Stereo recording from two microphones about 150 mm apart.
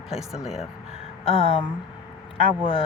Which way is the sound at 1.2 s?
40° left (ahead or behind).